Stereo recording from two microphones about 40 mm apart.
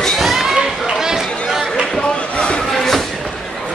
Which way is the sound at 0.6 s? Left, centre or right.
Centre.